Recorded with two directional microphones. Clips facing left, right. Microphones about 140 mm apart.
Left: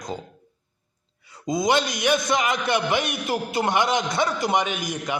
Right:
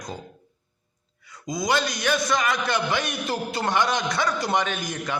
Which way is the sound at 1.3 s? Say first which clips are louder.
Left 3 dB; 25° left (ahead or behind).